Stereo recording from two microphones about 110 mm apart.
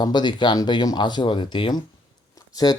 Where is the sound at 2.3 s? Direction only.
35° left (ahead or behind).